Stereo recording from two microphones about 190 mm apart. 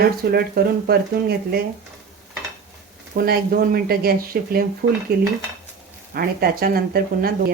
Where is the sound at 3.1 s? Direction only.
50° right (ahead or behind).